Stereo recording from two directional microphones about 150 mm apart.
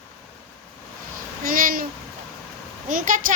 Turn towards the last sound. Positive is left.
turn(degrees=-65)  # may be behind; listen again after turning